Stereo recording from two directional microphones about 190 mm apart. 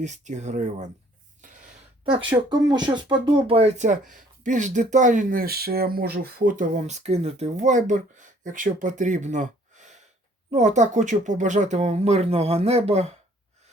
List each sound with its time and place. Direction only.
0.0 s speech: 40° right (ahead or behind)
1.4 s gasp: 45° right (ahead or behind)
2.5 s speech: 20° right (ahead or behind)